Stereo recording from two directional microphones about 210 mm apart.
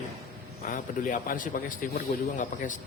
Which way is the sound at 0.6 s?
40° left (ahead or behind).